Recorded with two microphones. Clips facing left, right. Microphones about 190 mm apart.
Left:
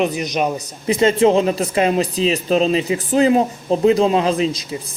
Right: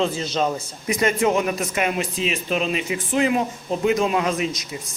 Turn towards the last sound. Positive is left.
turn(degrees=30)  # may be behind; listen again after turning